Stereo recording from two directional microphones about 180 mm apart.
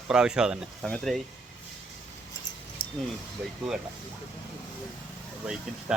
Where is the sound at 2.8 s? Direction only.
25° left (ahead or behind).